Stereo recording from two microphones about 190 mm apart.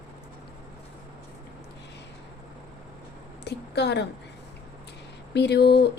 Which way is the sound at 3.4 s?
60° left (ahead or behind).